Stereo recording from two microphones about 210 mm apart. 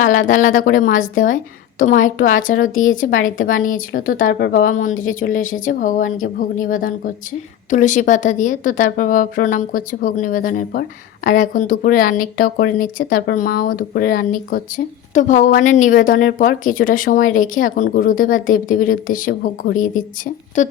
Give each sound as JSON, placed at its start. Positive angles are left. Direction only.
{"t": 0.0, "sound": "a woman's voice", "side_deg": 40}